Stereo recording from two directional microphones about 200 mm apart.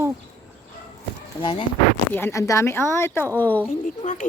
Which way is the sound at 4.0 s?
40° left (ahead or behind).